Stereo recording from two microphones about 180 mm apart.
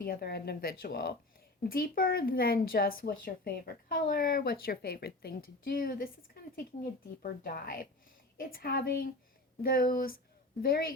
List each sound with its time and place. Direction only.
0.0 s speech: 60° left (ahead or behind)
7.2 s speech: 55° left (ahead or behind)